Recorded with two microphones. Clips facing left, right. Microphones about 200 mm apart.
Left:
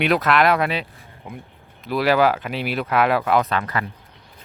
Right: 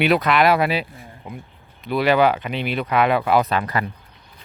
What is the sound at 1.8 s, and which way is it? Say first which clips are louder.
Speech: right 1 dB; centre (ahead or behind).